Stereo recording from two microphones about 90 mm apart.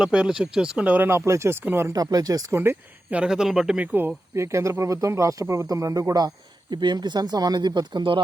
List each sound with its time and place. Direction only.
0.0 s speech: 10° right (ahead or behind); by 1.9 s 25° right (ahead or behind)
1.9 s speech: 45° right (ahead or behind)
2.6 s speech: 25° right (ahead or behind)
3.2 s speech: 5° right (ahead or behind)
3.9 s speech: 25° right (ahead or behind); by 8.2 s 60° right (ahead or behind)